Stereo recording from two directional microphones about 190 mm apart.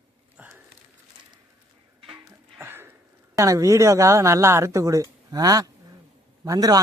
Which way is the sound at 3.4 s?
15° right (ahead or behind).